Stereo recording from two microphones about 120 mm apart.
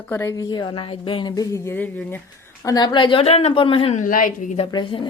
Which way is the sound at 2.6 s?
35° left (ahead or behind).